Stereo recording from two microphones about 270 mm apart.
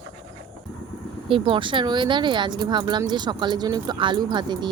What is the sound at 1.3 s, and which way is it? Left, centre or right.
Speech, centre.